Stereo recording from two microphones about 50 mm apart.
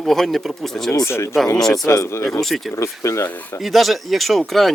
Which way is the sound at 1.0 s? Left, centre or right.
Left.